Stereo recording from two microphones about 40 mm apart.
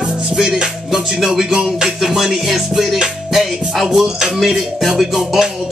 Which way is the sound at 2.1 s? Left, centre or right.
Centre.